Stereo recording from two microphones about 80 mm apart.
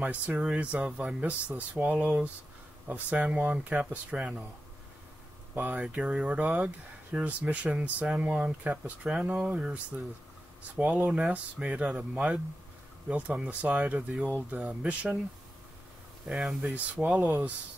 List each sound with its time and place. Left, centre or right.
0.0 s speech: centre
5.5 s speech: centre
16.3 s speech: centre